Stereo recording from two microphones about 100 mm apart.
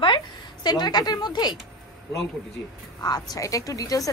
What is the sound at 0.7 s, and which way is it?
Speech, 45° left (ahead or behind).